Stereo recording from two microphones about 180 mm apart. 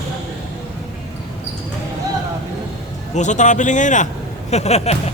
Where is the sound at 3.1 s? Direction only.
40° left (ahead or behind).